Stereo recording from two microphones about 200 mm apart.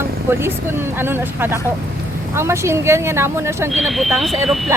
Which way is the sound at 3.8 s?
Centre (ahead or behind).